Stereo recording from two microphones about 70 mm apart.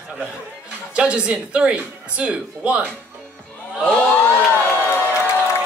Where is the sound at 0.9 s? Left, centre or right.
Centre.